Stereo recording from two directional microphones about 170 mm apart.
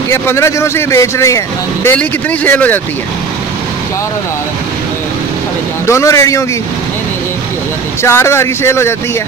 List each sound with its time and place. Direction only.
0.1 s speech: 15° left (ahead or behind)
5.9 s speech: 15° left (ahead or behind)
8.0 s speech: 15° left (ahead or behind)